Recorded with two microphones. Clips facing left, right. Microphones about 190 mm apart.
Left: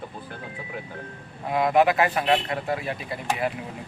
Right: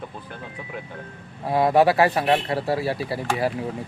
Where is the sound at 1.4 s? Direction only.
35° right (ahead or behind).